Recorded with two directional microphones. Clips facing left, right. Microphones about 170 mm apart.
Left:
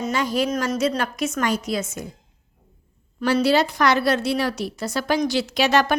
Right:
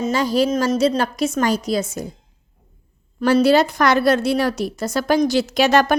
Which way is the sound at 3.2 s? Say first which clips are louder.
Right 4 dB; 45° right (ahead or behind).